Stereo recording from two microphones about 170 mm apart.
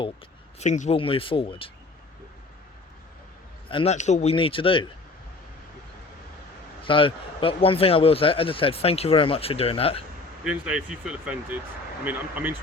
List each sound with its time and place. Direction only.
0.6 s a man's voice: 45° left (ahead or behind)
3.7 s a man's voice: 30° left (ahead or behind)
3.9 s a man's voice: 40° left (ahead or behind)
6.8 s a man's voice: 30° left (ahead or behind)
10.4 s speech: 5° right (ahead or behind)